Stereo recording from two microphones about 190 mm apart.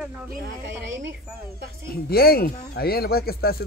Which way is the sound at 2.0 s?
55° left (ahead or behind).